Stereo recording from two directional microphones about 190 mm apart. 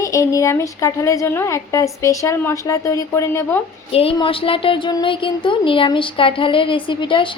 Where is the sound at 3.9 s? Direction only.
30° left (ahead or behind).